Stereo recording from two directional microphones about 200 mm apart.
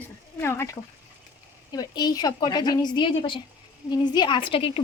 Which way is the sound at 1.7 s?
20° left (ahead or behind).